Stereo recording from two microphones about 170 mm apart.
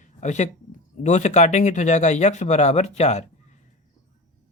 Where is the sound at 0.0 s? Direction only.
45° left (ahead or behind).